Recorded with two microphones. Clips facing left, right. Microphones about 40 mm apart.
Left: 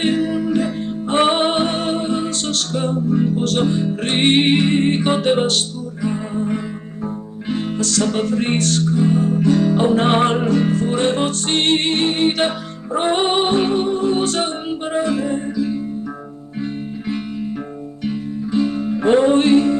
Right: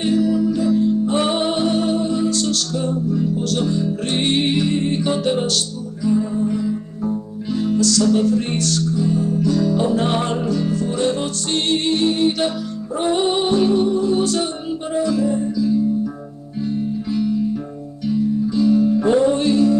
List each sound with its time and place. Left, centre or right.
0.0 s music: left